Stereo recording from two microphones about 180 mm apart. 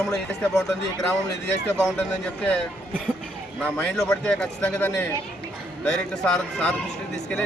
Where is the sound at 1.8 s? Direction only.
5° left (ahead or behind).